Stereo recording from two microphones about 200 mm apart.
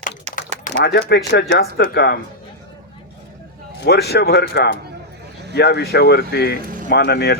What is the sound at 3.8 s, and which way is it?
A man's voice, 55° left (ahead or behind).